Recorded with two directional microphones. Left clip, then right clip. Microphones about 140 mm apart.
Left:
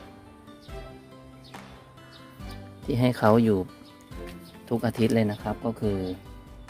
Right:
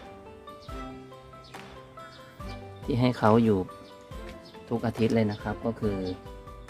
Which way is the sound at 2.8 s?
15° left (ahead or behind).